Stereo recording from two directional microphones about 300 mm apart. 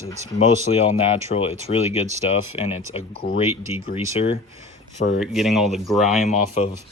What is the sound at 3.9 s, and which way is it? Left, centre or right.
Speech, centre.